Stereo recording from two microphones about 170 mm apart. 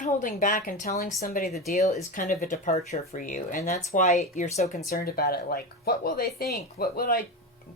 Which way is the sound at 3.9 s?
45° left (ahead or behind).